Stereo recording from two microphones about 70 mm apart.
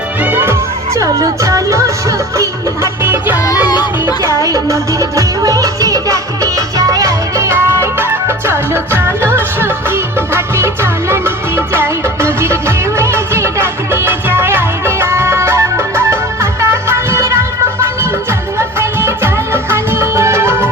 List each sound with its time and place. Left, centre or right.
0.2 s music: right
0.9 s music: right
3.0 s music: right
4.2 s music: right